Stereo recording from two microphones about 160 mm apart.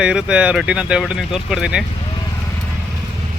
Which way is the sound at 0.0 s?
5° right (ahead or behind).